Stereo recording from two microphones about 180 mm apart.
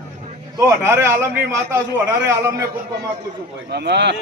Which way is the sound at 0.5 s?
15° right (ahead or behind).